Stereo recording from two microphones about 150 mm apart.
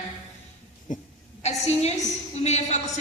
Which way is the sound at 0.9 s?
60° left (ahead or behind).